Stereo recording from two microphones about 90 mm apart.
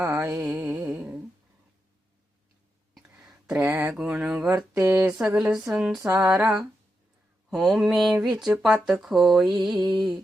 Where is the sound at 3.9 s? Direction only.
10° right (ahead or behind).